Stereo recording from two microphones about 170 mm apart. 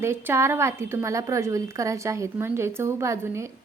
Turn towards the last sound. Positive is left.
turn(degrees=-15)  # may be behind; listen again after turning